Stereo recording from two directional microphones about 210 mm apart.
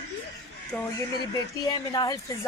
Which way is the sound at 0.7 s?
15° left (ahead or behind).